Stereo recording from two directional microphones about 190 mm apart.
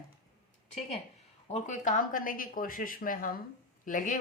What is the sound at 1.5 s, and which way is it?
Speech, 40° left (ahead or behind).